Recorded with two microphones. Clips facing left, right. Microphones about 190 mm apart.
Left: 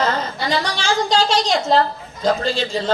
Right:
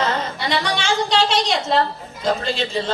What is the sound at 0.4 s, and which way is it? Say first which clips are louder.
A man's voice: left 1 dB; 35° left (ahead or behind).